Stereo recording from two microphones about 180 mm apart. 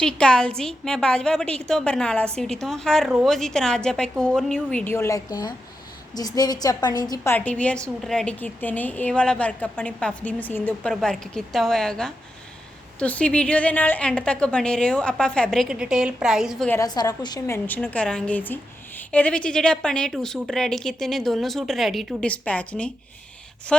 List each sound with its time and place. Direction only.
0.0 s a woman's voice: 5° left (ahead or behind); by 7.3 s 20° left (ahead or behind)
7.3 s a woman's voice: 5° left (ahead or behind)
16.6 s a woman's voice: 15° left (ahead or behind)